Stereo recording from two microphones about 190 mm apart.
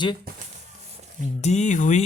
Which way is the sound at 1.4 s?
35° left (ahead or behind).